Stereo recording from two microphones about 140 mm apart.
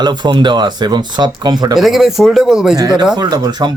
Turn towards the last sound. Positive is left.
turn(degrees=-30)  # may be behind; listen again after turning